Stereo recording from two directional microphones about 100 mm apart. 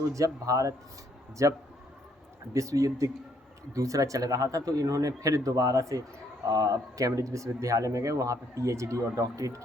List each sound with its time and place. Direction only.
0.1 s speech: 35° right (ahead or behind)